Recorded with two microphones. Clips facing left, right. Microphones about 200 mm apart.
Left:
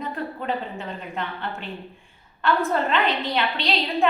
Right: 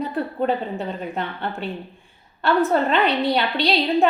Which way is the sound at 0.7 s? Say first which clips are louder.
Right 5 dB; 35° right (ahead or behind).